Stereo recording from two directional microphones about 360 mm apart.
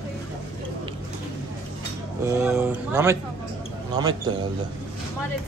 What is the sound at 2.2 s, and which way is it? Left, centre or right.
Speech, centre.